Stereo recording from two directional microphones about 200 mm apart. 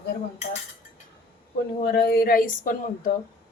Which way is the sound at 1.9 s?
50° left (ahead or behind).